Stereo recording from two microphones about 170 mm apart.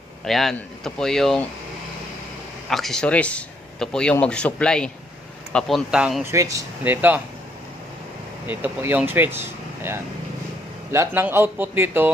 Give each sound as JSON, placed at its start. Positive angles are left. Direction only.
{"t": 0.3, "sound": "speech", "side_deg": 0}
{"t": 2.6, "sound": "speech", "side_deg": 0}
{"t": 6.2, "sound": "a man's voice", "side_deg": -20}
{"t": 8.4, "sound": "a man's voice", "side_deg": -10}
{"t": 10.9, "sound": "a man's voice", "side_deg": -15}